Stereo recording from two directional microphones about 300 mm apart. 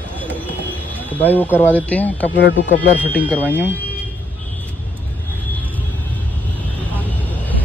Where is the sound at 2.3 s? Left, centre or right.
Left.